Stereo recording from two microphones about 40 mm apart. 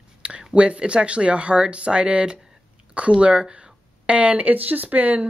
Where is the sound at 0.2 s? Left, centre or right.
Right.